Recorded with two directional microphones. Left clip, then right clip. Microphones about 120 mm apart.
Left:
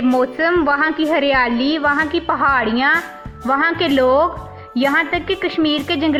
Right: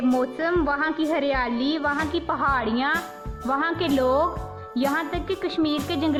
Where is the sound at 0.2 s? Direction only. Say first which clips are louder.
Left 8 dB; 55° left (ahead or behind).